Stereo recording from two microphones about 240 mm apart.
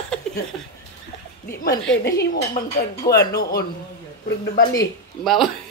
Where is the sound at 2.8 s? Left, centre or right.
Left.